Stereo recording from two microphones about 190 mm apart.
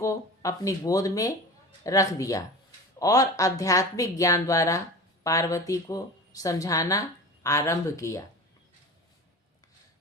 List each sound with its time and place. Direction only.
0.0 s a woman's voice: 15° left (ahead or behind)